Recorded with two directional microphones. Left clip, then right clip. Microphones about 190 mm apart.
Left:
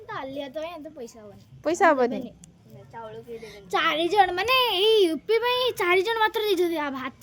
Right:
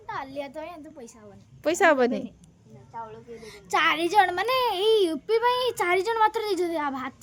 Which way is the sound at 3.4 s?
45° right (ahead or behind).